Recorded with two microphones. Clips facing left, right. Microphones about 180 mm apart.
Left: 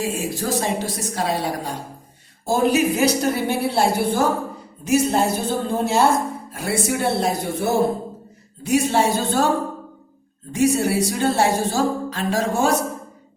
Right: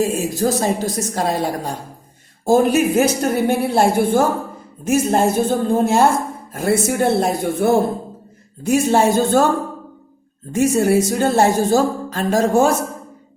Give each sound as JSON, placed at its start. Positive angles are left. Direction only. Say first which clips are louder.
{"t": 0.0, "sound": "a woman's voice", "louder": "right 6 dB", "side_deg": -45}
{"t": 10.5, "sound": "a woman's voice", "louder": "right 4 dB", "side_deg": -50}